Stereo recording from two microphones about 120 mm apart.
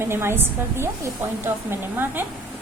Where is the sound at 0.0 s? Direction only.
20° right (ahead or behind).